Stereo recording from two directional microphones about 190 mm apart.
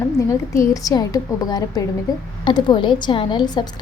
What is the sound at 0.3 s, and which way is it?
A woman's voice, 15° left (ahead or behind).